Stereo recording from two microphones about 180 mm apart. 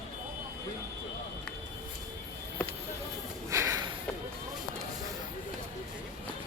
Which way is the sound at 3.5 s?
15° right (ahead or behind).